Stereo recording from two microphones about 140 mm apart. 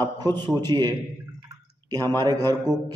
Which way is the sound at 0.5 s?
30° right (ahead or behind).